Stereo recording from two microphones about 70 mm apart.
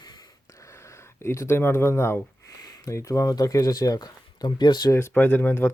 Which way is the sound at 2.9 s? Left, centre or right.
Left.